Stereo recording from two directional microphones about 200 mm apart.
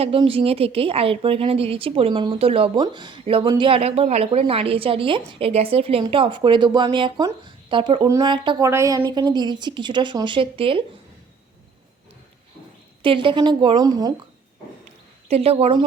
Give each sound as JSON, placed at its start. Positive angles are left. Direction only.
{"t": 0.0, "sound": "a woman's voice", "side_deg": -30}
{"t": 13.0, "sound": "a woman's voice", "side_deg": -25}
{"t": 15.3, "sound": "a woman's voice", "side_deg": -30}